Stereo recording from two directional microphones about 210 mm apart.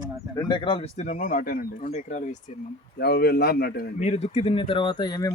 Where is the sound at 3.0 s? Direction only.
50° left (ahead or behind).